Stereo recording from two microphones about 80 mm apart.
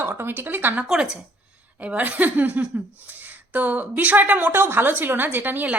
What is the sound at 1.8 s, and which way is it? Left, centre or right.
Speech, centre.